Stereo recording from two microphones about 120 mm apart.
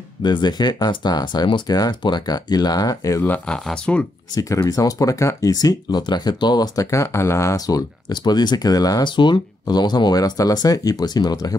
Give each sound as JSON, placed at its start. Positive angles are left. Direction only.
{"t": 0.2, "sound": "speech", "side_deg": 40}
{"t": 3.3, "sound": "speech", "side_deg": 5}
{"t": 4.4, "sound": "speech", "side_deg": 30}